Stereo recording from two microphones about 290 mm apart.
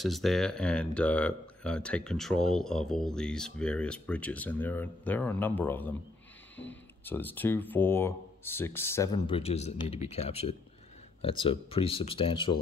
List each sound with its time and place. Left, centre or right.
0.0 s speech: centre